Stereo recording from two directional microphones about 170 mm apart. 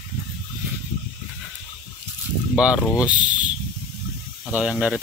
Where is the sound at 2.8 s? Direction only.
15° left (ahead or behind).